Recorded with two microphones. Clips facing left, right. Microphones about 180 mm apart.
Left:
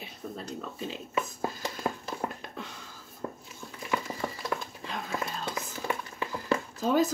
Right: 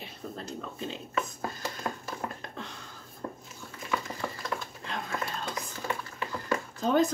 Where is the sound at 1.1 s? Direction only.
20° left (ahead or behind).